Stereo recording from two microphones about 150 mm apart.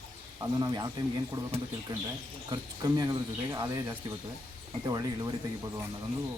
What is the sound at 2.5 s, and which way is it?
Speech, 25° right (ahead or behind).